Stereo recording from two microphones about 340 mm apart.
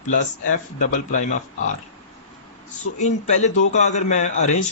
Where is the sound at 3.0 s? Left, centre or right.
Left.